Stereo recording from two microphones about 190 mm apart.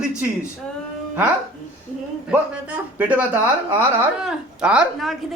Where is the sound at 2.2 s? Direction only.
10° right (ahead or behind).